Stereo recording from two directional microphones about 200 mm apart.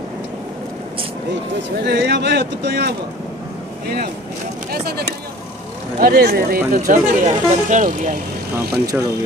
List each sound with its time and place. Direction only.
1.8 s speech: 55° right (ahead or behind); by 8.1 s 40° right (ahead or behind)